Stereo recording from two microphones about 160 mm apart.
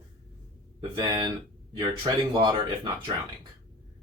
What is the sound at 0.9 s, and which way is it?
Speech, 30° right (ahead or behind).